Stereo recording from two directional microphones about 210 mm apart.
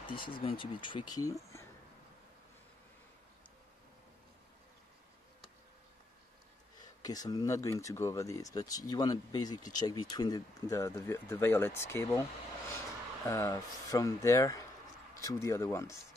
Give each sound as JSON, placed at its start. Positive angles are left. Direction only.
{"t": 0.0, "sound": "speech", "side_deg": 25}
{"t": 6.8, "sound": "speech", "side_deg": 20}